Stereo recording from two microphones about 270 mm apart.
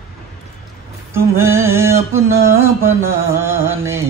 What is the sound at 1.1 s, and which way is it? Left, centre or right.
Mantra, centre.